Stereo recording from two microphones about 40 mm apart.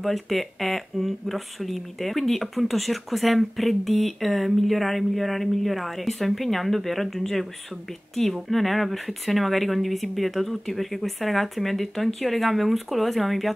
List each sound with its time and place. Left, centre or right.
0.0 s speech: centre